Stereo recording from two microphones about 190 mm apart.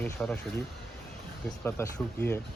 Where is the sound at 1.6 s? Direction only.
10° left (ahead or behind).